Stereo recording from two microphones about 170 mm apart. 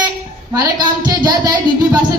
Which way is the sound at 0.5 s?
25° right (ahead or behind).